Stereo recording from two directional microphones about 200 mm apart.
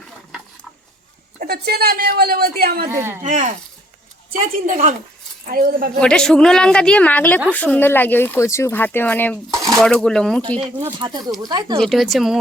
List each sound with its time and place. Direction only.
1.4 s a woman's voice: 50° right (ahead or behind)
2.9 s speech: 10° right (ahead or behind)
3.2 s a woman's voice: 35° right (ahead or behind)
6.0 s a woman's voice: 5° left (ahead or behind)
11.4 s speech: 20° right (ahead or behind)
11.8 s a woman's voice: centre (ahead or behind)